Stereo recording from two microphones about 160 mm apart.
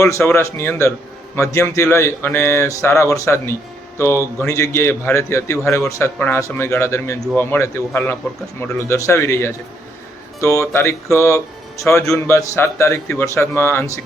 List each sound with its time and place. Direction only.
0.0 s speech: 15° left (ahead or behind)